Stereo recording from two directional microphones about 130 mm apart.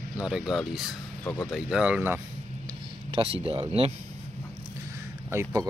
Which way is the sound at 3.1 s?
45° right (ahead or behind).